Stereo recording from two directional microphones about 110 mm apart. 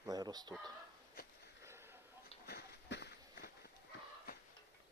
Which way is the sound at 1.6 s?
20° right (ahead or behind).